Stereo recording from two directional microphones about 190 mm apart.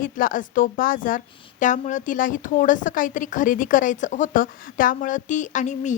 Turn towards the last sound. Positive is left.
turn(degrees=40)  # may be behind; listen again after turning